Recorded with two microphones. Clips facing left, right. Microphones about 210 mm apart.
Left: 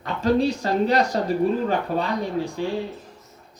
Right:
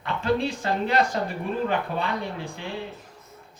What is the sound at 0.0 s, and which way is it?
A woman's voice, 35° left (ahead or behind).